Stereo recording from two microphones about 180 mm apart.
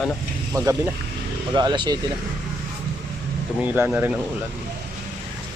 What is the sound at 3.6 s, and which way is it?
Speech, 10° right (ahead or behind).